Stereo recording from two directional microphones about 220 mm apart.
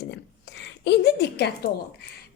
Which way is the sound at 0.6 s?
50° left (ahead or behind).